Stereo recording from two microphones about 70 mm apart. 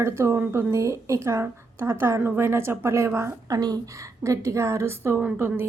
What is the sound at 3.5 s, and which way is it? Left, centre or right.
Speech, right.